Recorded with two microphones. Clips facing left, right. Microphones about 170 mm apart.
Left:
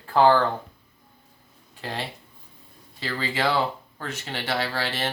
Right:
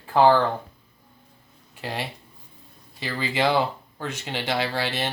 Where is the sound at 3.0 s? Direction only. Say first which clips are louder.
Right 2 dB; 15° right (ahead or behind).